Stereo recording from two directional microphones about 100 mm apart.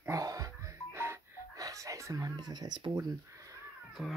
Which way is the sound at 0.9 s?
25° right (ahead or behind).